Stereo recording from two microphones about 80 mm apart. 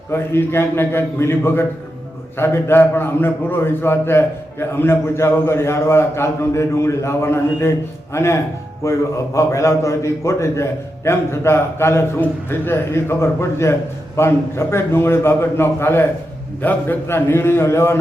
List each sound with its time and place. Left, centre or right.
0.1 s a man's voice: left